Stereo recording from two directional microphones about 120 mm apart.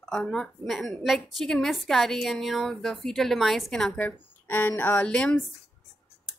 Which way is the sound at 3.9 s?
15° left (ahead or behind).